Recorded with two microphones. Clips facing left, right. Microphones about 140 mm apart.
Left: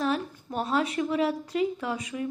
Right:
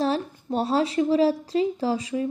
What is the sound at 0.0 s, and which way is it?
Speech, 30° right (ahead or behind).